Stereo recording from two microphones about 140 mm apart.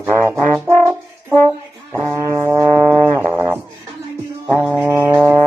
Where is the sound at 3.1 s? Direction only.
15° right (ahead or behind).